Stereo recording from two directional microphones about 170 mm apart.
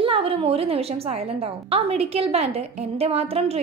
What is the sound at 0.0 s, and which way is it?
A woman's voice, 35° right (ahead or behind).